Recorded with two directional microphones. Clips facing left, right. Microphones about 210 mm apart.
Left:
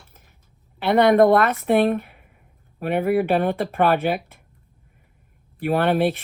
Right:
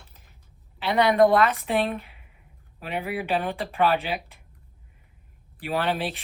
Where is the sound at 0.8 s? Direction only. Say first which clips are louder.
Left 4 dB; 50° left (ahead or behind).